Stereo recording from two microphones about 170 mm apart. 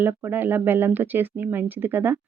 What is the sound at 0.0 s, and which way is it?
Speech, 10° right (ahead or behind).